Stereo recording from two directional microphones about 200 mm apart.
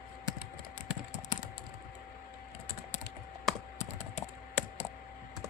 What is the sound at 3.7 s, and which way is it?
Typing, 35° left (ahead or behind).